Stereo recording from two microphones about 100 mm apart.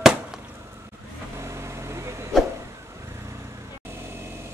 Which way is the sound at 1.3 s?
30° right (ahead or behind).